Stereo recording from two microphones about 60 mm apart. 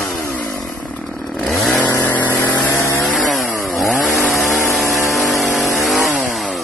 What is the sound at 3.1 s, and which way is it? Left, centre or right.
Chainsaw, centre.